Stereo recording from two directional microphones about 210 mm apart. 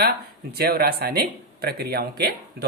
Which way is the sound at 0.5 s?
45° right (ahead or behind).